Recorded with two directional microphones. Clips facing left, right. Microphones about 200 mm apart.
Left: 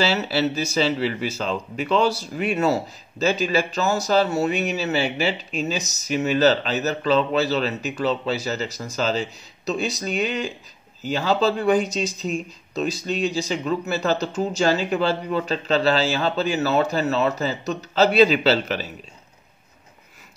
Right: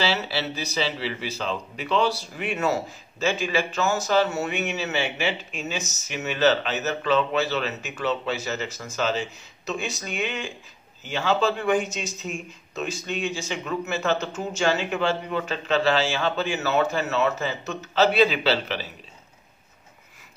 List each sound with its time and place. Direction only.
0.0 s speech: 45° left (ahead or behind)